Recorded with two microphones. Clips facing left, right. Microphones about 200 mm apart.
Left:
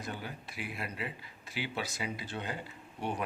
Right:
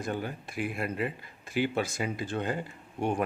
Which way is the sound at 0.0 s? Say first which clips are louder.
Right 8 dB; 50° right (ahead or behind).